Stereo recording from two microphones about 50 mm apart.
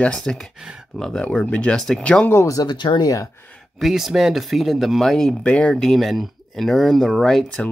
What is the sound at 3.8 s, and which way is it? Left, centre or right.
Speech, centre.